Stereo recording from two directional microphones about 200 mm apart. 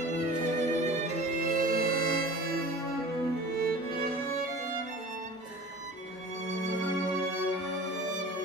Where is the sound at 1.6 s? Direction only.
45° right (ahead or behind).